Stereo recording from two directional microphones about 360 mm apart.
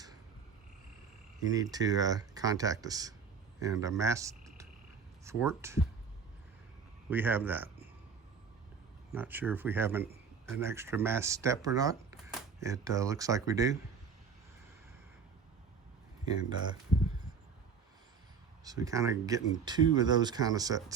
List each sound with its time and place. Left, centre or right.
1.5 s speech: centre
7.1 s speech: centre
9.1 s speech: centre
16.3 s speech: centre
18.6 s speech: centre